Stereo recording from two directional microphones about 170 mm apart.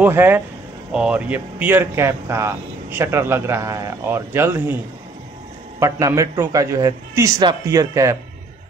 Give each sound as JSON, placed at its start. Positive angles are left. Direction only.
{"t": 0.0, "sound": "speech", "side_deg": -10}
{"t": 5.8, "sound": "a man's voice", "side_deg": -20}